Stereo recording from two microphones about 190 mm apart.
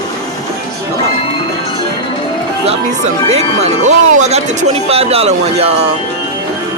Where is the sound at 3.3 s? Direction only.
35° right (ahead or behind).